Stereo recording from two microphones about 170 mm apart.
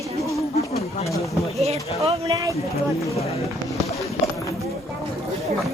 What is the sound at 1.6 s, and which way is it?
Speech, 35° right (ahead or behind).